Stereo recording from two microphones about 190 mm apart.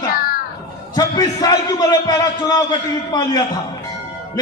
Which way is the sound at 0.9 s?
20° left (ahead or behind).